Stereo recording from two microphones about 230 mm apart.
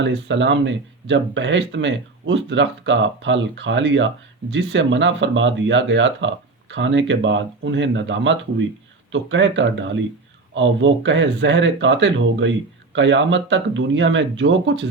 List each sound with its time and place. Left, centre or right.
0.0 s speech: right